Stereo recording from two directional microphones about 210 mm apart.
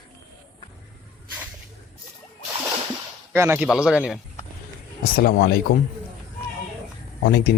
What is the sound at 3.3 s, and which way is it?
Speech, 10° right (ahead or behind).